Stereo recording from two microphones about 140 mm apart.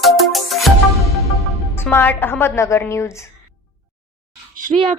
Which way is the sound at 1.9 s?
15° left (ahead or behind).